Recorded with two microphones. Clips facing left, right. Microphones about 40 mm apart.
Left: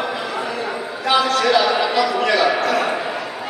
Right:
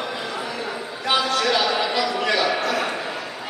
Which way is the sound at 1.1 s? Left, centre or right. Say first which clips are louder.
Left 5 dB; centre.